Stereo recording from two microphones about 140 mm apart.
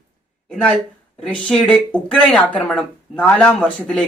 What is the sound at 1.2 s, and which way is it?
Speech, 5° left (ahead or behind).